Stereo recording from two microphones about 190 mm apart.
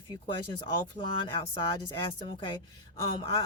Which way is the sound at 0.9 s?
25° left (ahead or behind).